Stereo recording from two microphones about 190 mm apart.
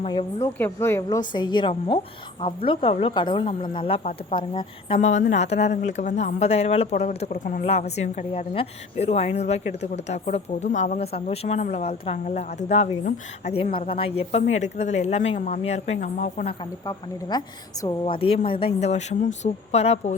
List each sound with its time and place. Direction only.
0.0 s a woman's voice: 25° left (ahead or behind)
16.8 s a woman's voice: 20° left (ahead or behind); by 20.1 s 35° left (ahead or behind)